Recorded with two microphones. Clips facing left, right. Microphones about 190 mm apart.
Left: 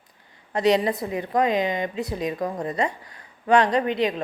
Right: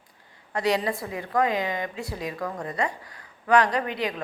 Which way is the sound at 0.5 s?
20° left (ahead or behind).